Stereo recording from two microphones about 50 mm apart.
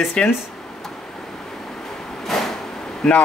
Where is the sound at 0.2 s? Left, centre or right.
Centre.